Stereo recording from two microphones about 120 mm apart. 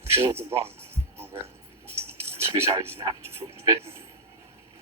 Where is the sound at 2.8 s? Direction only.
20° right (ahead or behind).